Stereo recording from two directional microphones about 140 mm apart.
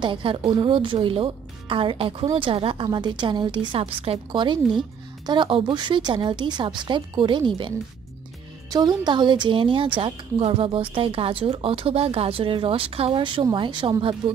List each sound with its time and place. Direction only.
0.0 s speech: 35° right (ahead or behind)